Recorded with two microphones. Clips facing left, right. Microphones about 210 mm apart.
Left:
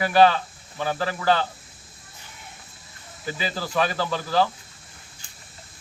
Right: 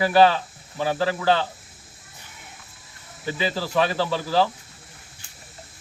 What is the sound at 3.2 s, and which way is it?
Speech, 30° right (ahead or behind).